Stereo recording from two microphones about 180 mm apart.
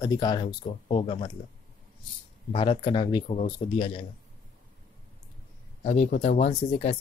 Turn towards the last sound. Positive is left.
turn(degrees=35)  # may be behind; listen again after turning